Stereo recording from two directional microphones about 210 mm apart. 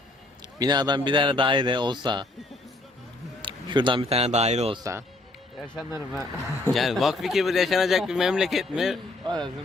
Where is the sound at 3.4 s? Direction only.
20° right (ahead or behind).